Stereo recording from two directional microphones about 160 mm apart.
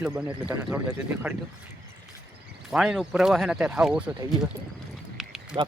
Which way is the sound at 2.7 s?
5° right (ahead or behind).